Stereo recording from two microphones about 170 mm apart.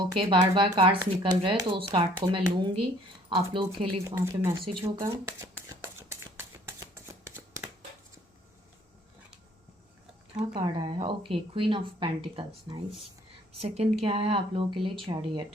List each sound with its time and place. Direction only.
0.0 s speech: 25° right (ahead or behind)
4.0 s speech: 15° right (ahead or behind)
4.6 s speech: 30° right (ahead or behind)
5.0 s a sound: 15° right (ahead or behind)
6.7 s shuffling cards: 15° right (ahead or behind)
10.5 s speech: 30° right (ahead or behind)